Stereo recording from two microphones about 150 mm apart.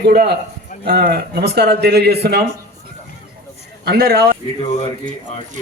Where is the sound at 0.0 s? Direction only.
85° right.